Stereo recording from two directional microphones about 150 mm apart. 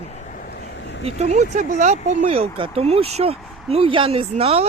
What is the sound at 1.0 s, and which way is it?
Speech, 45° right (ahead or behind).